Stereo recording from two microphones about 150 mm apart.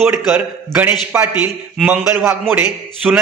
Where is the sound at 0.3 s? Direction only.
15° right (ahead or behind).